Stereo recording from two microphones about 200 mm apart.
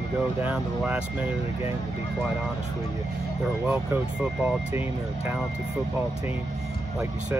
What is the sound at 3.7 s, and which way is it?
Speech, 5° right (ahead or behind).